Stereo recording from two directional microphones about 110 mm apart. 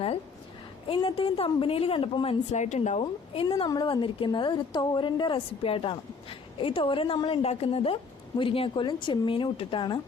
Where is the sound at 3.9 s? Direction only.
50° left (ahead or behind).